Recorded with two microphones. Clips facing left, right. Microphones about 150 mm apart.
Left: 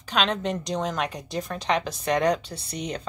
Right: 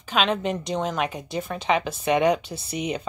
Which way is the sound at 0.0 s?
5° right (ahead or behind).